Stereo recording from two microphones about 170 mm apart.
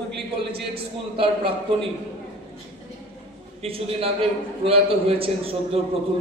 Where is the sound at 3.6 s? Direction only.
35° right (ahead or behind).